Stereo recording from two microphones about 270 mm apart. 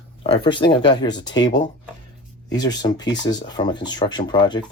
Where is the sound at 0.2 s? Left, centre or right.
Centre.